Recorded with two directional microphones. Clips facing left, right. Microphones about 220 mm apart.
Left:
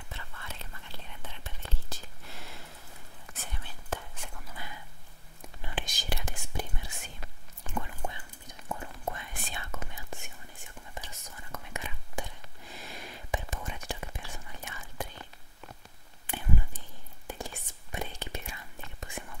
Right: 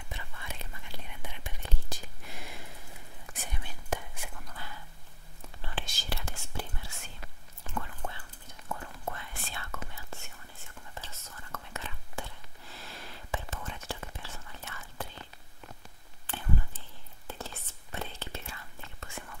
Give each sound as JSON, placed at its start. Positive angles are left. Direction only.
{"t": 0.1, "sound": "whispering", "side_deg": -15}
{"t": 5.4, "sound": "whispering", "side_deg": 15}
{"t": 16.3, "sound": "a sound", "side_deg": 15}
{"t": 17.3, "sound": "whispering", "side_deg": 15}